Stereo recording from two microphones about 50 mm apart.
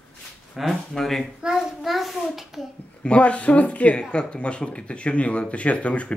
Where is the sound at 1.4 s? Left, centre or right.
Centre.